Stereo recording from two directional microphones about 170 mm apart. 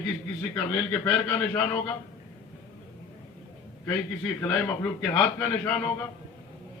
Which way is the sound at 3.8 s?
15° left (ahead or behind).